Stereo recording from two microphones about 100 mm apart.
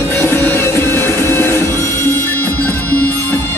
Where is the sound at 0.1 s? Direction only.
25° left (ahead or behind).